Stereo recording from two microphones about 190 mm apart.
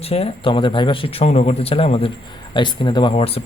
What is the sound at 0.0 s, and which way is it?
A man's voice, 30° left (ahead or behind).